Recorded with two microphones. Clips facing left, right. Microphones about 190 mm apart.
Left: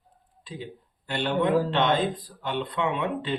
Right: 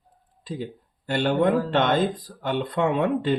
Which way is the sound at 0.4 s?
45° right (ahead or behind).